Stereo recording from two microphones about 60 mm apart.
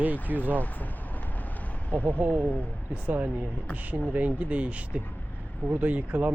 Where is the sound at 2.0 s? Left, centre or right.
Right.